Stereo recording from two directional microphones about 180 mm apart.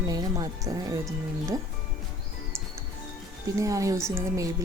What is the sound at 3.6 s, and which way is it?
Speech, 20° right (ahead or behind).